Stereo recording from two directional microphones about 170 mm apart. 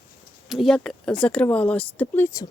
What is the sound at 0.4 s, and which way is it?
Speech, centre (ahead or behind).